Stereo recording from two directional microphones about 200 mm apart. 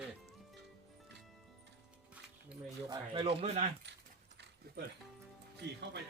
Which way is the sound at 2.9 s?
30° right (ahead or behind).